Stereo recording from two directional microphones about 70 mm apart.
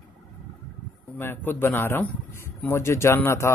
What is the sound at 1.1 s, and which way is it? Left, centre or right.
Speech, left.